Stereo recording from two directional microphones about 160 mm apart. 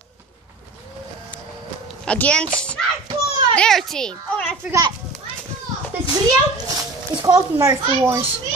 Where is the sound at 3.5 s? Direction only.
Centre (ahead or behind).